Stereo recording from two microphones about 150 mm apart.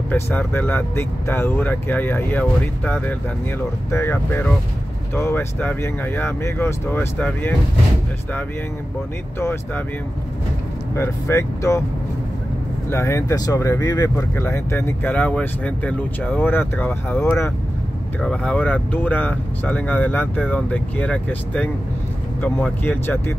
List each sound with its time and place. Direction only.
0.1 s speech: 15° left (ahead or behind)
9.4 s speech: 15° left (ahead or behind)
11.0 s speech: 20° left (ahead or behind)
12.9 s speech: 20° left (ahead or behind)
18.2 s speech: 5° left (ahead or behind)